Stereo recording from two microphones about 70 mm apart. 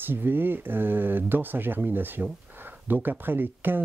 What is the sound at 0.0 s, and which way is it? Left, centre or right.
Speech, right.